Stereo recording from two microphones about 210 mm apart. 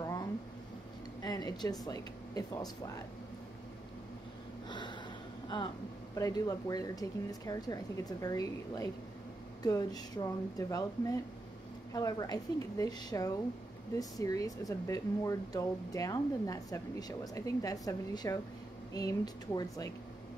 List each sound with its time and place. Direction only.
0.0 s a sound: 15° left (ahead or behind)
1.2 s speech: 20° left (ahead or behind)
4.6 s gasp: 20° left (ahead or behind)
5.5 s speech: 20° left (ahead or behind)